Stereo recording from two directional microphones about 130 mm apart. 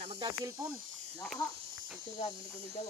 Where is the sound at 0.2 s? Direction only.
25° right (ahead or behind).